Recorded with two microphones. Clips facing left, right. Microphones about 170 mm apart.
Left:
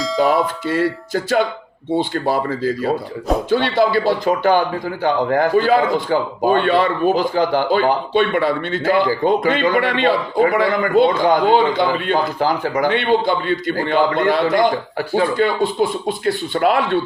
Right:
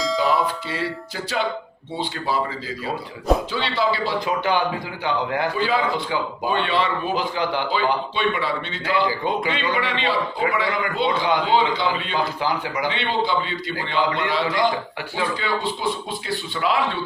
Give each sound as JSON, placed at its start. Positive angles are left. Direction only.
{"t": 0.0, "sound": "bell", "side_deg": 0}
{"t": 0.4, "sound": "a man's voice", "side_deg": 50}